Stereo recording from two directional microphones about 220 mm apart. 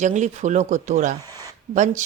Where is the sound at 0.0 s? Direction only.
35° right (ahead or behind).